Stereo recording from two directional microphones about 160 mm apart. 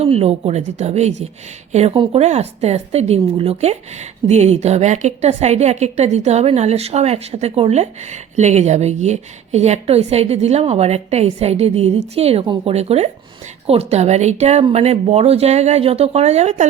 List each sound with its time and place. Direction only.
0.0 s speech: 40° right (ahead or behind)